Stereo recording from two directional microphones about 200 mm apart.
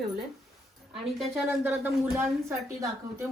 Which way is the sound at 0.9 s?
Centre (ahead or behind).